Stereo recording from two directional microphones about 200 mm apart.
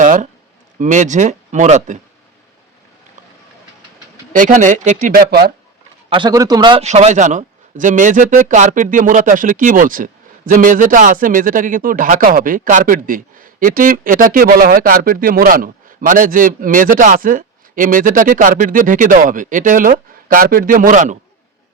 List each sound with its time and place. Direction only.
0.0 s a sound: 40° right (ahead or behind)
0.8 s speech: 40° right (ahead or behind)
4.3 s speech: 40° right (ahead or behind)
6.1 s a man's voice: 25° right (ahead or behind); by 21.2 s 40° right (ahead or behind)